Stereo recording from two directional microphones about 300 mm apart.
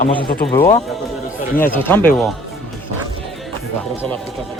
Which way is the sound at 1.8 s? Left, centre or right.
Centre.